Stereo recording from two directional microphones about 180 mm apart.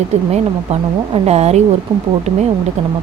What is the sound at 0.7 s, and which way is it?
Speech, 35° right (ahead or behind).